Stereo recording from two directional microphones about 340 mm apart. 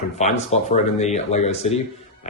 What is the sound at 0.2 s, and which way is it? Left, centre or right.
Speech, centre.